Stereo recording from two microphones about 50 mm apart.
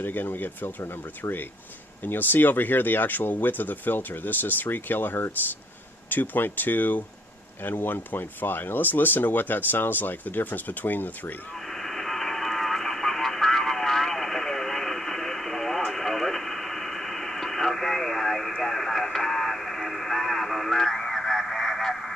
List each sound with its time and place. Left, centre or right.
0.0 s speech: left
2.0 s speech: left
11.8 s vehicle: centre